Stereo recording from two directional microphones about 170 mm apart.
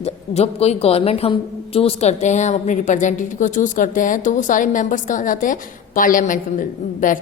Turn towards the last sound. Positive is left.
turn(degrees=50)  # may be behind; listen again after turning